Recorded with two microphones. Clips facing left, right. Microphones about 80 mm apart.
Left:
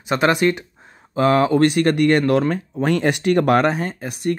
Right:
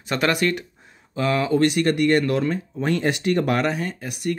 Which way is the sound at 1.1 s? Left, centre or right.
Left.